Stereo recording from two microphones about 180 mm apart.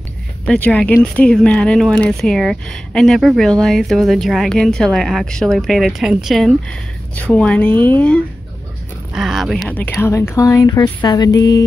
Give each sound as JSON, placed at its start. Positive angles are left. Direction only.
{"t": 0.5, "sound": "speech", "side_deg": 5}
{"t": 9.1, "sound": "speech", "side_deg": 0}